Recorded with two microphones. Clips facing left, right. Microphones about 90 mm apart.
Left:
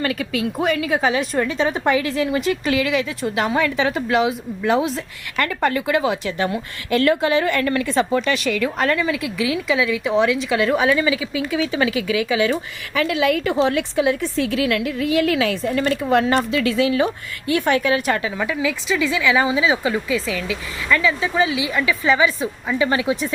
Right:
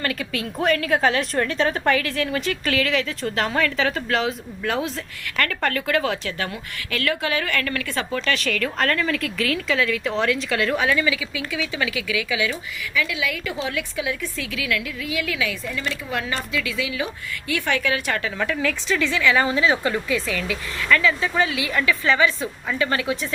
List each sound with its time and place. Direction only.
0.0 s a woman's voice: 5° left (ahead or behind); by 18.3 s 20° left (ahead or behind)
18.3 s speech: 10° left (ahead or behind)